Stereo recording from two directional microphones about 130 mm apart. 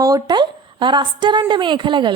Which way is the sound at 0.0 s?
30° right (ahead or behind).